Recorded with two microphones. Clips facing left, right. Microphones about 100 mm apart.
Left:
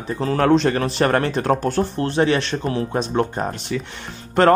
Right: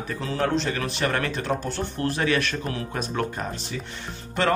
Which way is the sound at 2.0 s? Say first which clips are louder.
Left 4 dB; 30° left (ahead or behind).